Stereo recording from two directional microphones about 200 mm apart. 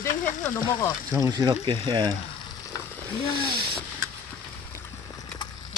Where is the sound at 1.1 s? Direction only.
20° right (ahead or behind).